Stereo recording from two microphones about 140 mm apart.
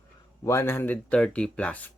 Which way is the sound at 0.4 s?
20° left (ahead or behind).